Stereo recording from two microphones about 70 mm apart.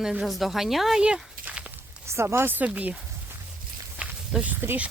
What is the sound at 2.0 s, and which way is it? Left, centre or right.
Speech, right.